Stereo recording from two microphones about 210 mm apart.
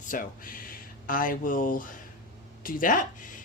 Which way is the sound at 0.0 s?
40° left (ahead or behind).